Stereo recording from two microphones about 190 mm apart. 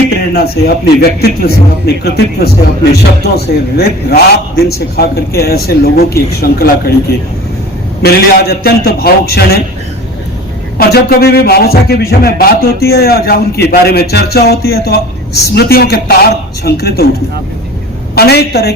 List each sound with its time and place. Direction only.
0.2 s a man's voice: 55° left (ahead or behind)
8.0 s a man's voice: 55° left (ahead or behind)
10.8 s a man's voice: 55° left (ahead or behind)
18.1 s a man's voice: 55° left (ahead or behind)